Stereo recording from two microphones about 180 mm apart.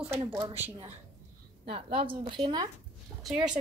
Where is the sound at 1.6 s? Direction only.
30° right (ahead or behind).